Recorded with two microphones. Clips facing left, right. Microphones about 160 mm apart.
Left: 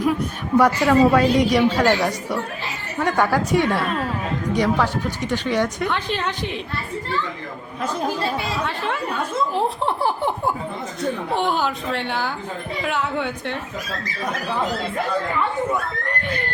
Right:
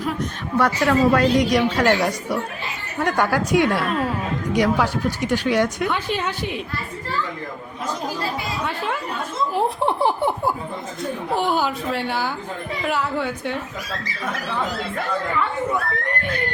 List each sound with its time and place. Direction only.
0.6 s a woman's voice: 5° left (ahead or behind)
9.6 s speech: 15° right (ahead or behind)
11.3 s a woman's voice: 5° right (ahead or behind)